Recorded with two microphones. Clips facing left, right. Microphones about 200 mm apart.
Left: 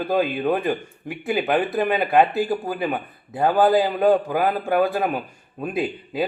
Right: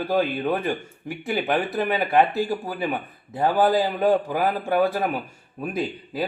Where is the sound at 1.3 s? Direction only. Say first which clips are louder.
Left 3 dB; 15° left (ahead or behind).